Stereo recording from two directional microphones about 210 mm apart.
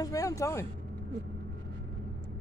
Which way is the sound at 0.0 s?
15° left (ahead or behind).